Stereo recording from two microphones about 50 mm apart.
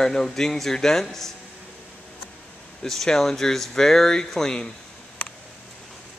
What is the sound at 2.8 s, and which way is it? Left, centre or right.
Speech, centre.